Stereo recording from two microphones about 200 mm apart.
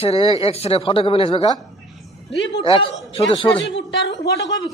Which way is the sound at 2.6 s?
25° left (ahead or behind).